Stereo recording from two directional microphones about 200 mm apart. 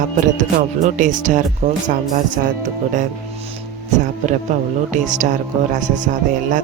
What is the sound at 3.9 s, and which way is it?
Speech, 35° right (ahead or behind).